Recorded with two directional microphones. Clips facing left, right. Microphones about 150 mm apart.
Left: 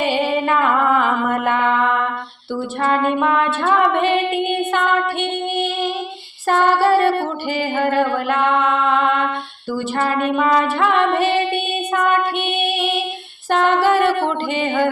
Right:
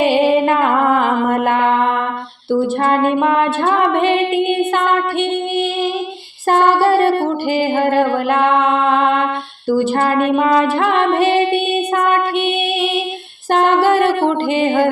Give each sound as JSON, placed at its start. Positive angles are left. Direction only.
{"t": 0.0, "sound": "music", "side_deg": -40}
{"t": 6.5, "sound": "music", "side_deg": -40}
{"t": 13.5, "sound": "music", "side_deg": -40}